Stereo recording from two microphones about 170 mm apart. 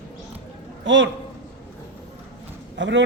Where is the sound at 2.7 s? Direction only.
90° right.